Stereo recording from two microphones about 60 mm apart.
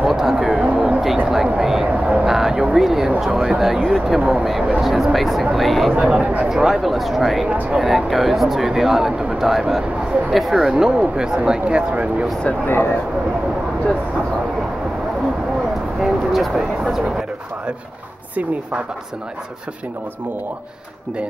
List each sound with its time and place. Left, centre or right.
0.0 s a sound: centre
1.3 s speech: centre
2.2 s a sound: centre
3.3 s speech: centre
5.9 s speech: centre
6.5 s speech: centre; by 12.3 s right
12.6 s speech: left
16.0 s vehicle: centre